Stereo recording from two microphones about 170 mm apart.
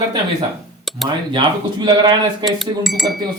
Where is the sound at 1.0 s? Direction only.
25° right (ahead or behind).